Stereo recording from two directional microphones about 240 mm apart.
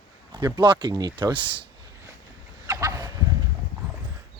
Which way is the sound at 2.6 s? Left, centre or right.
Centre.